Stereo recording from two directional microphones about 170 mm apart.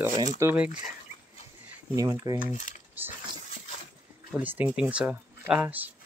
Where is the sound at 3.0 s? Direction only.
10° right (ahead or behind).